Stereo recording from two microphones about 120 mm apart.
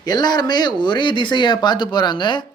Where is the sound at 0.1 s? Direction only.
35° left (ahead or behind).